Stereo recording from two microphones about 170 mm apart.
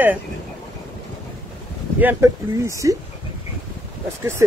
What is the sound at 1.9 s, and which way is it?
Speech, 15° right (ahead or behind).